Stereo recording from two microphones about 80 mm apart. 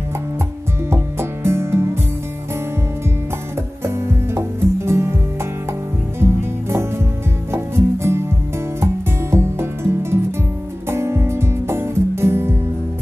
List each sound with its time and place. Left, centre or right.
0.8 s music: right
3.8 s music: right
6.1 s music: right
9.3 s music: right